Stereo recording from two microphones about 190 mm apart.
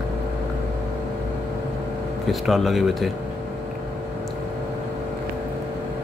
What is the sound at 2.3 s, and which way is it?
Speech, centre (ahead or behind).